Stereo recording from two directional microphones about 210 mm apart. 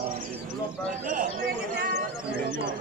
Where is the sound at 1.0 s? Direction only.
40° right (ahead or behind).